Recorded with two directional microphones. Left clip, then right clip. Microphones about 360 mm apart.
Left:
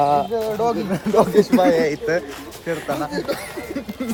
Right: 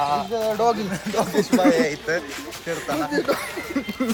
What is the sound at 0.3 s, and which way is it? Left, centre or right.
Speech, centre.